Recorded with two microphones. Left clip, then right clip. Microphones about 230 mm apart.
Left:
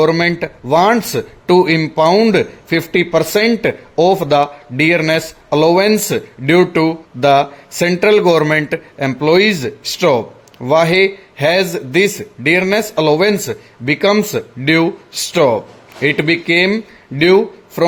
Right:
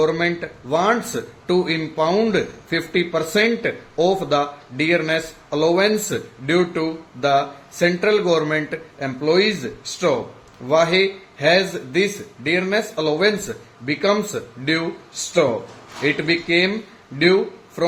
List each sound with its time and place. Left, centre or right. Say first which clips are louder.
0.0 s speech: left 6 dB; left
16.0 s speech: left 6 dB; left